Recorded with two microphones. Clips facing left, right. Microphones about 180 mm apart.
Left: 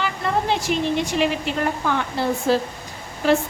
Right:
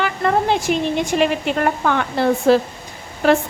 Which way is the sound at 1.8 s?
65° right (ahead or behind).